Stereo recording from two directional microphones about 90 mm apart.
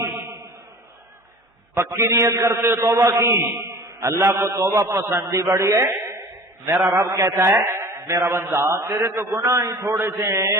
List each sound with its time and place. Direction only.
1.7 s a man's voice: 30° right (ahead or behind)